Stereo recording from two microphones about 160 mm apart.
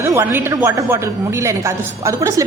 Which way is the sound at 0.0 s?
15° right (ahead or behind).